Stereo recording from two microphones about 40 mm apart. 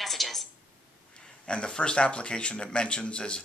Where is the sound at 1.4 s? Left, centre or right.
Left.